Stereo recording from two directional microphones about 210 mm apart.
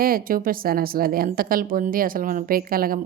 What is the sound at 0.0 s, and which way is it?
A woman's voice, 40° right (ahead or behind).